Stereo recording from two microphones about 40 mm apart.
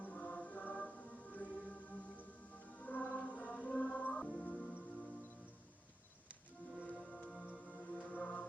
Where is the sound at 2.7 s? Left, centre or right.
Left.